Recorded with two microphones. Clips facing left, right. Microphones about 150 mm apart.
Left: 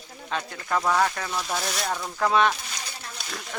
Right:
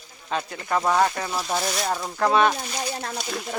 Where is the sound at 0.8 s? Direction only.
20° right (ahead or behind).